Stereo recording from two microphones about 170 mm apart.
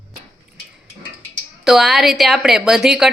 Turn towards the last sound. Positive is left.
turn(degrees=-5)  # may be behind; listen again after turning